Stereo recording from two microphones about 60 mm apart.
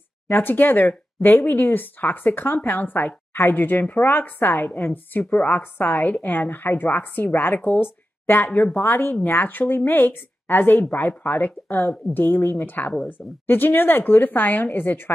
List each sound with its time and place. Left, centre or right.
0.3 s speech: left